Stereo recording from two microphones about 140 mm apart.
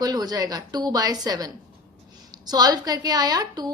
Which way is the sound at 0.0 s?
25° right (ahead or behind).